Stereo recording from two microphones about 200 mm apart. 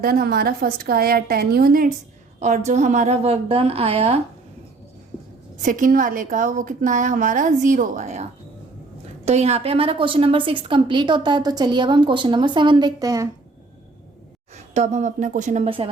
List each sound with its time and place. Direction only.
0.0 s a woman's voice: 50° right (ahead or behind)
2.4 s a woman's voice: 35° right (ahead or behind)
5.6 s a woman's voice: 40° right (ahead or behind); by 13.2 s 15° right (ahead or behind)
14.5 s a woman's voice: 35° right (ahead or behind)